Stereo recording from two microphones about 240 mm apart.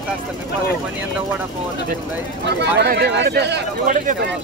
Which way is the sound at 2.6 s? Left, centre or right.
Right.